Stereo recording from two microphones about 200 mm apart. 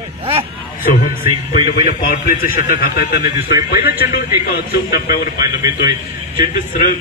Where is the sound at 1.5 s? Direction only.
45° left (ahead or behind).